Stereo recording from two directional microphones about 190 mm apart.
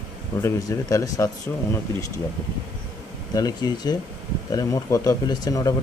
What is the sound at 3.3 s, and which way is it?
Speech, 20° left (ahead or behind).